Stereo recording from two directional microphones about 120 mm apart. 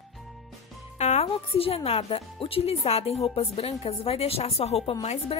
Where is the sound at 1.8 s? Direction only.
55° left (ahead or behind).